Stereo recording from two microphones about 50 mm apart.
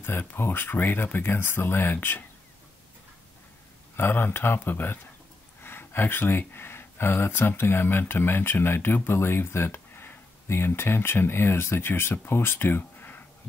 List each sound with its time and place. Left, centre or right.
0.2 s speech: left
3.9 s speech: left